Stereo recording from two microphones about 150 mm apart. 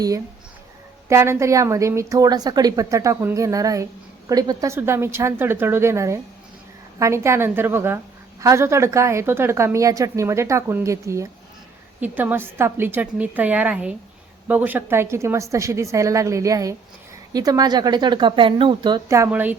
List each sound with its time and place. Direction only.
1.0 s a woman's voice: 20° right (ahead or behind)
19.0 s a woman's voice: 20° right (ahead or behind)